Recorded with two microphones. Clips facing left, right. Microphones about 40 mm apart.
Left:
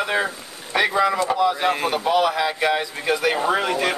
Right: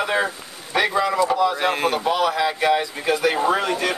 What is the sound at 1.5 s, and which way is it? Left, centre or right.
Speech, centre.